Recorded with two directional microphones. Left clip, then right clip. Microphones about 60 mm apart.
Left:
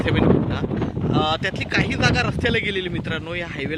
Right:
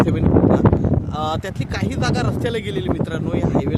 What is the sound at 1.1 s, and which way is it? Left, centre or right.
Speech, right.